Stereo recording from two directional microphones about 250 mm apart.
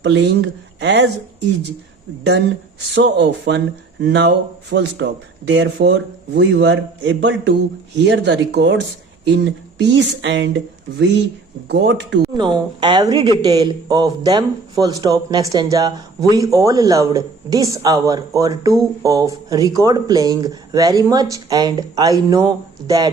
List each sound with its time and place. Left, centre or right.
0.0 s speech: right
2.9 s speech: right
11.7 s speech: right
12.2 s a woman's voice: centre